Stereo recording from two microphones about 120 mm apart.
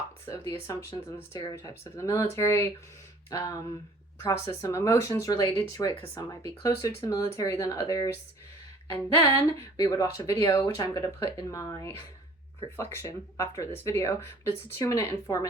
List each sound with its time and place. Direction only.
0.3 s speech: 25° left (ahead or behind)
9.3 s speech: 30° left (ahead or behind)
12.7 s speech: 20° left (ahead or behind)